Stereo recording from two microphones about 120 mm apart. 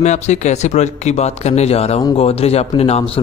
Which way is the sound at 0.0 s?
75° left (ahead or behind).